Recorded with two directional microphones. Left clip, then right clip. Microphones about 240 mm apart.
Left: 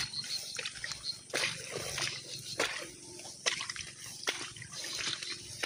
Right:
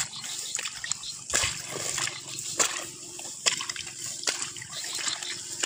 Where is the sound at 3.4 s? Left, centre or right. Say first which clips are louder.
Right 6 dB; right.